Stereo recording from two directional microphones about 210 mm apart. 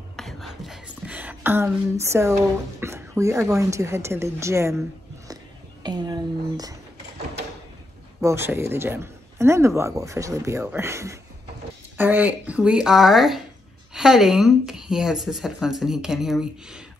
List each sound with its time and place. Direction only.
0.1 s a sound: centre (ahead or behind)
2.8 s speech: 15° right (ahead or behind)
5.9 s speech: 20° right (ahead or behind)
8.2 s speech: 10° right (ahead or behind)